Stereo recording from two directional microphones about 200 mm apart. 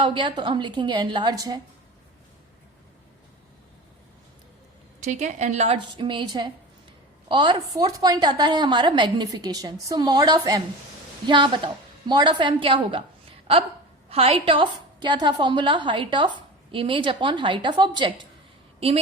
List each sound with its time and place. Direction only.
0.0 s a woman's voice: 25° right (ahead or behind)
4.9 s a woman's voice: 35° right (ahead or behind)
14.1 s a woman's voice: 30° right (ahead or behind)